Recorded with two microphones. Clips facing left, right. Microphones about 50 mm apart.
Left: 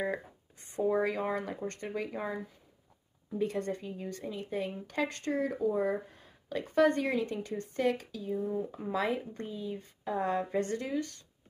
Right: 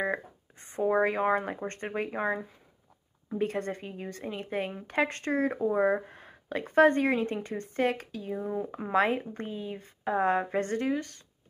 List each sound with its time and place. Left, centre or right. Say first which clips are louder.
0.0 s a woman's voice: right 3 dB; right